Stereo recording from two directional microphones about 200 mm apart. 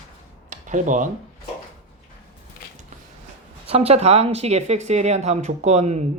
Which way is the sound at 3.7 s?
30° right (ahead or behind).